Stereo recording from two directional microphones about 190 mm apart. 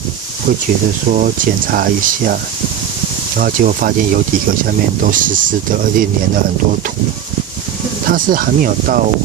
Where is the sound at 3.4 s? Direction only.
45° right (ahead or behind).